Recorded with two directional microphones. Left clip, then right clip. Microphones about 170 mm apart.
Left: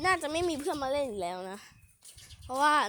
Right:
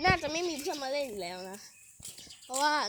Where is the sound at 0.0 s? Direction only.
25° left (ahead or behind).